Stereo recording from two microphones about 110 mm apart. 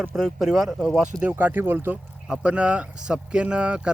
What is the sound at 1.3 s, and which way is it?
Speech, 15° right (ahead or behind).